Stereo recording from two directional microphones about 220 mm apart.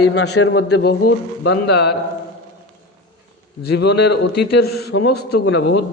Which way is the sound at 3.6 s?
50° left (ahead or behind).